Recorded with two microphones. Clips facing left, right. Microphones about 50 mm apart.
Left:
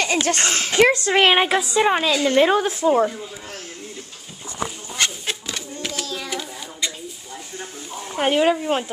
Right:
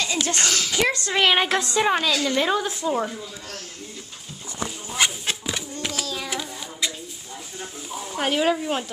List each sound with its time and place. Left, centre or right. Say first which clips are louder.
0.0 s speech: left 4 dB; left
1.4 s a woman's voice: left 3 dB; centre
2.2 s a woman's voice: left 6 dB; left
4.9 s a sound: right 2 dB; centre
8.1 s a woman's voice: left 4 dB; centre